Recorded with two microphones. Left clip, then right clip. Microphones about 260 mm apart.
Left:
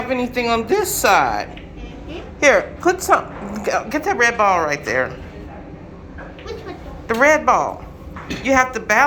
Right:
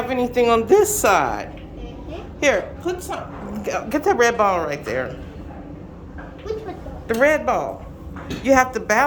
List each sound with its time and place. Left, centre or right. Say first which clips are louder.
0.1 s a woman's voice: right 2 dB; centre
7.1 s speech: left 4 dB; centre